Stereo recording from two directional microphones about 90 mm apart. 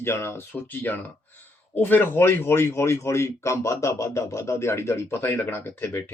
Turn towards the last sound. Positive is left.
turn(degrees=25)  # may be behind; listen again after turning